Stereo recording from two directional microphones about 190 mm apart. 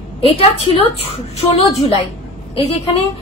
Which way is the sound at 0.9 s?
30° left (ahead or behind).